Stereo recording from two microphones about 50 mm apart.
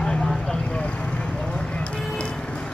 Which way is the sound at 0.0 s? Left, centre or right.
Centre.